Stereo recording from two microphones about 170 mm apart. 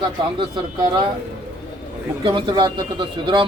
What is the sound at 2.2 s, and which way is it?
Speech, 25° right (ahead or behind).